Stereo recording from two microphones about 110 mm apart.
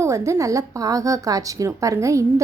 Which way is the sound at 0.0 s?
25° right (ahead or behind).